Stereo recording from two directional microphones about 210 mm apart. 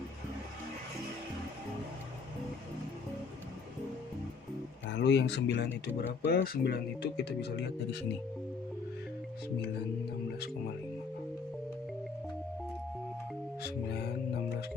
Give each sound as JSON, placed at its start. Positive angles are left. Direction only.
{"t": 4.9, "sound": "speech", "side_deg": 55}